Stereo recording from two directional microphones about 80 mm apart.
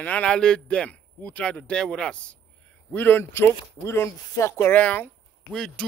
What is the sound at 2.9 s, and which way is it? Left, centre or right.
Speech, left.